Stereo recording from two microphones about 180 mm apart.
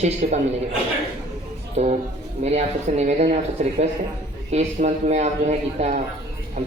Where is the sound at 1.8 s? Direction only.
40° right (ahead or behind).